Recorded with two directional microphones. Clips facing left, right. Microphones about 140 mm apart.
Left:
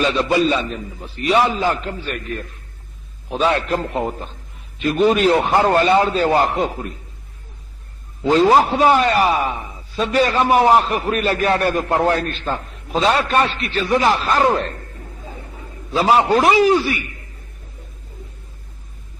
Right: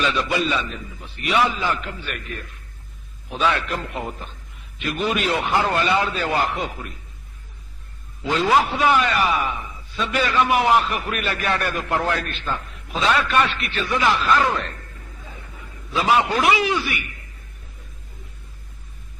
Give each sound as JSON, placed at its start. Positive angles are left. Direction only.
{"t": 0.0, "sound": "a man's voice", "side_deg": 35}
{"t": 8.2, "sound": "a man's voice", "side_deg": 35}